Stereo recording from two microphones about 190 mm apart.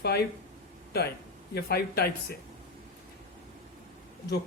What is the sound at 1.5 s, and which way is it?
Speech, 55° left (ahead or behind).